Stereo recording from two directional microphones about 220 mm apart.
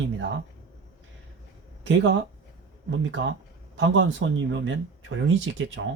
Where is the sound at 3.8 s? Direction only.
55° right (ahead or behind).